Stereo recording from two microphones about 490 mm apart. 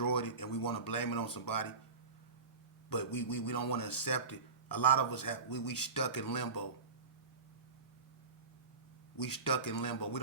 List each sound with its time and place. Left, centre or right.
0.0 s speech: left
2.9 s speech: left
9.1 s speech: left